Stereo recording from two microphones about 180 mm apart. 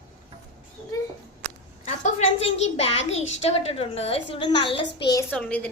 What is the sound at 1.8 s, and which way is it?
A woman's voice, 40° left (ahead or behind).